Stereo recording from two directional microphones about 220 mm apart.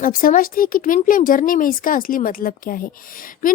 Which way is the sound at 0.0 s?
40° left (ahead or behind).